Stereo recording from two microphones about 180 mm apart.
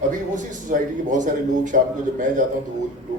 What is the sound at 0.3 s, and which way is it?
A man's voice, 45° right (ahead or behind).